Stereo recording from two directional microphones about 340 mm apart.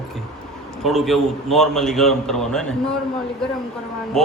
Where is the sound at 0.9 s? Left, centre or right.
Centre.